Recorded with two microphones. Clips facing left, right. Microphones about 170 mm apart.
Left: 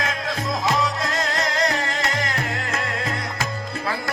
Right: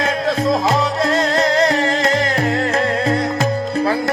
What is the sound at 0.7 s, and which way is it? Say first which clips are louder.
Music: right 6 dB; 30° right (ahead or behind).